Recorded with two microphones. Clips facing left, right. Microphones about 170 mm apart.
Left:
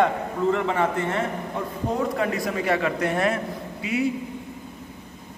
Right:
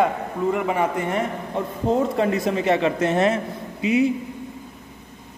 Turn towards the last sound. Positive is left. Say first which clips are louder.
# right 6 dB
turn(degrees=-20)  # may be behind; listen again after turning